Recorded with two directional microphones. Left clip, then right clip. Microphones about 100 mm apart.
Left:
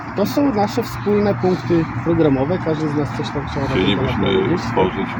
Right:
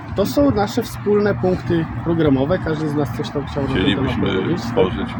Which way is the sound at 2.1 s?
20° right (ahead or behind).